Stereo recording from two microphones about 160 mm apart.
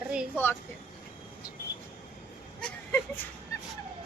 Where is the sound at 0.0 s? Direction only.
5° right (ahead or behind).